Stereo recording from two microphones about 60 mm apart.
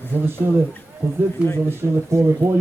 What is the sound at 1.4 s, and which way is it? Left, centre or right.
Speech, left.